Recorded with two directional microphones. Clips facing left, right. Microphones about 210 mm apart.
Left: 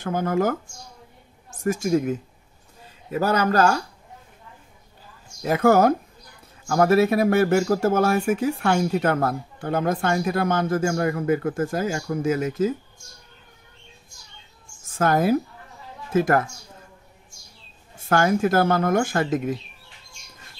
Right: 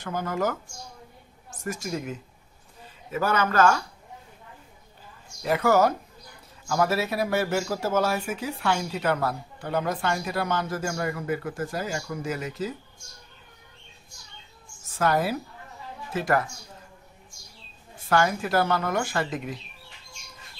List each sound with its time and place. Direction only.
0.0 s speech: 50° left (ahead or behind)
1.6 s speech: 50° left (ahead or behind)
3.1 s a man's voice: 40° left (ahead or behind)
5.4 s speech: 45° left (ahead or behind)
14.9 s speech: 50° left (ahead or behind)
18.0 s speech: 50° left (ahead or behind)